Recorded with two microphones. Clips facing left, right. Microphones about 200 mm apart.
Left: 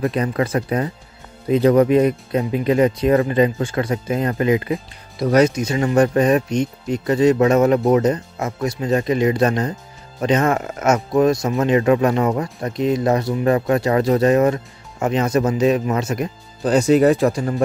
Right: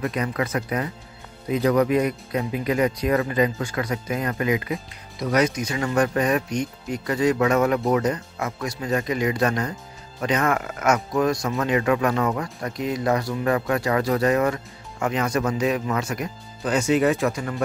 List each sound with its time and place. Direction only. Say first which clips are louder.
0.0 s speech: left 5 dB; 30° left (ahead or behind)
16.6 s speech: left 6 dB; 35° left (ahead or behind)